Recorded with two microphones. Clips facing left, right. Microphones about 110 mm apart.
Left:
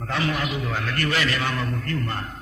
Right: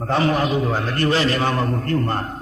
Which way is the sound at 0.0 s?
35° right (ahead or behind).